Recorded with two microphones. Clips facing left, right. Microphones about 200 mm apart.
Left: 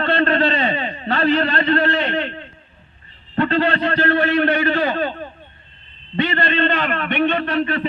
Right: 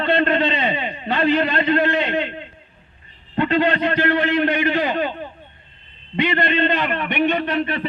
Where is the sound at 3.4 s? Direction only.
15° right (ahead or behind).